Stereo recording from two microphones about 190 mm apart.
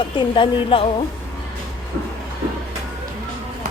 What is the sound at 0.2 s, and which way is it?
Speech, 25° left (ahead or behind).